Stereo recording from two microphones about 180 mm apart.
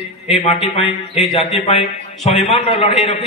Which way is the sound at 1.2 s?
Centre (ahead or behind).